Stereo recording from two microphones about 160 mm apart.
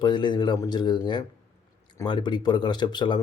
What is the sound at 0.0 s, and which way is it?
Speech, 30° left (ahead or behind).